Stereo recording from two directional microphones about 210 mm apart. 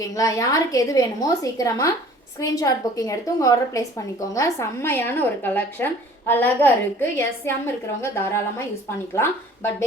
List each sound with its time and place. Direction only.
0.0 s a woman's voice: 15° left (ahead or behind)